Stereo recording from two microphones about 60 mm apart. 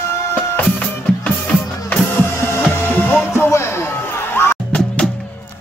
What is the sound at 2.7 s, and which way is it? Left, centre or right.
Music, left.